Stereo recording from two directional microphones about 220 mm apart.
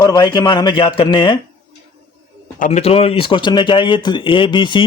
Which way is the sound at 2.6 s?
30° left (ahead or behind).